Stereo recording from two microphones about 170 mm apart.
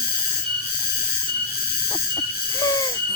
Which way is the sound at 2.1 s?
20° left (ahead or behind).